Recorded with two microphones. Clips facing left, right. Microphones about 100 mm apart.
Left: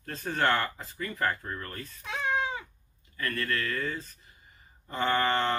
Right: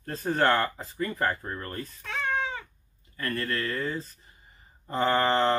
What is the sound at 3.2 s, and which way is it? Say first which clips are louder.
Speech: right 1 dB; 30° right (ahead or behind).